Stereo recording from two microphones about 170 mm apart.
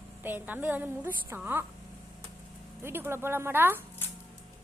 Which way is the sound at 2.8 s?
15° right (ahead or behind).